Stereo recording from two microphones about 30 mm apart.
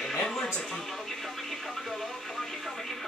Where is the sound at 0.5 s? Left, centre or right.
Centre.